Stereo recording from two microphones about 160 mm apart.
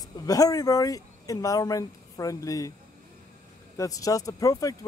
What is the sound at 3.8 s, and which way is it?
Speech, 20° left (ahead or behind).